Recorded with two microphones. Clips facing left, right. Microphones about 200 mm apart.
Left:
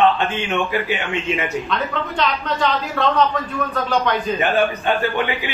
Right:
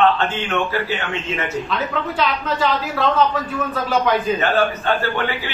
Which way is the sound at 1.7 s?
Centre (ahead or behind).